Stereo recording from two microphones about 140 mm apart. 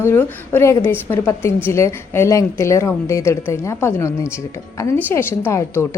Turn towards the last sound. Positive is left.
turn(degrees=20)  # may be behind; listen again after turning